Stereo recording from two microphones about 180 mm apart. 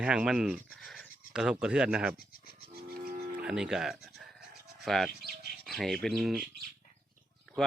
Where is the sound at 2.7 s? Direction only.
55° right (ahead or behind).